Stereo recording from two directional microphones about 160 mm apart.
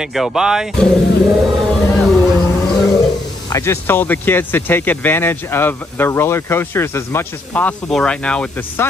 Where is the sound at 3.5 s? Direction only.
15° left (ahead or behind).